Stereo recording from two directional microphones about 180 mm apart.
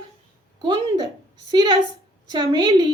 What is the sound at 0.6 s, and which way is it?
A woman's voice, 25° right (ahead or behind).